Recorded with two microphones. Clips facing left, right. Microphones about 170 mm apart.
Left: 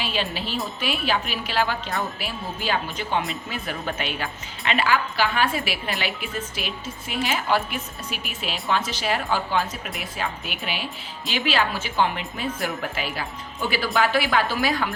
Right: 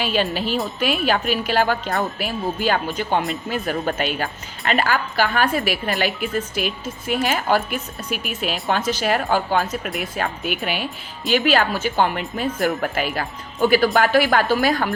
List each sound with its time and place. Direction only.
0.0 s speech: 45° right (ahead or behind)